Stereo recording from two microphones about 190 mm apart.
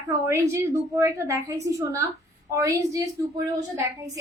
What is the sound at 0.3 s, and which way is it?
Speech, 15° right (ahead or behind).